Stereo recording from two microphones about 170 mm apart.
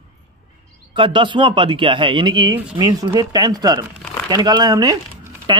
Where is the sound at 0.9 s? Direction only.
30° right (ahead or behind).